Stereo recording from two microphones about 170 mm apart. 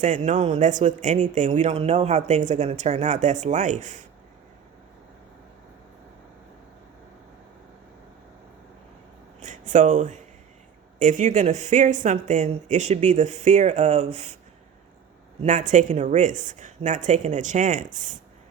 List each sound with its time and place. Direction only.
0.0 s speech: 45° right (ahead or behind)
9.4 s a sound: 45° right (ahead or behind)
11.0 s speech: 45° right (ahead or behind)
15.4 s speech: 45° right (ahead or behind)